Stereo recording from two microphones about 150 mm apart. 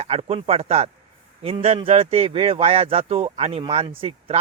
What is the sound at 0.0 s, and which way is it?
Speech, 45° right (ahead or behind).